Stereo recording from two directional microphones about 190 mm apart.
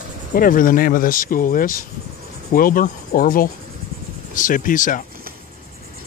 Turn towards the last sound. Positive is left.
turn(degrees=45)  # may be behind; listen again after turning